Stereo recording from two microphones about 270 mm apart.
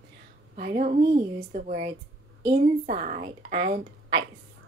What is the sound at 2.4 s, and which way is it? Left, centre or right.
Female singing, right.